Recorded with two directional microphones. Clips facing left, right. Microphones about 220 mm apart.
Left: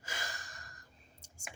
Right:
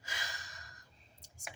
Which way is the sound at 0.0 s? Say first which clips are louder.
Left 3 dB; 50° left (ahead or behind).